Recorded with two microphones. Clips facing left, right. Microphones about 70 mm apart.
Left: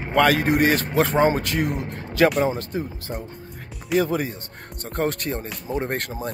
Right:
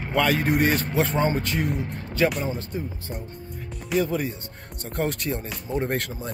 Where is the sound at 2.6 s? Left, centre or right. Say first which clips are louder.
Left 3 dB; left.